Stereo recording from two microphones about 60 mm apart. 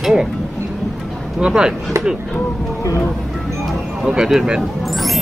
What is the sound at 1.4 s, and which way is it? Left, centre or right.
Speech, centre.